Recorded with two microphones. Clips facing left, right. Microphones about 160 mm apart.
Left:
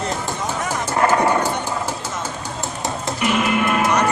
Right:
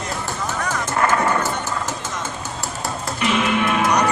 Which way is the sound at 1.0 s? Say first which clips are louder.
Left 3 dB; 15° left (ahead or behind).